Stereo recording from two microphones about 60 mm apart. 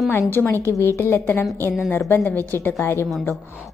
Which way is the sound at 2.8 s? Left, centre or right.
Left.